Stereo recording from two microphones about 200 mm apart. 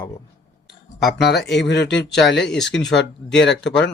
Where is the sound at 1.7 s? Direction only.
60° left (ahead or behind).